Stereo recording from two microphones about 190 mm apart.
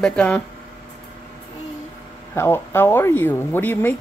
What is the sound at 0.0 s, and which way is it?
Speech, 5° left (ahead or behind).